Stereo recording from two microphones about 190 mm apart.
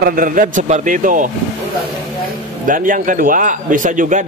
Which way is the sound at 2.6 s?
45° right (ahead or behind).